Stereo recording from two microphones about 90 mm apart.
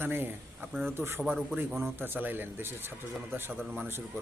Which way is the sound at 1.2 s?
10° right (ahead or behind).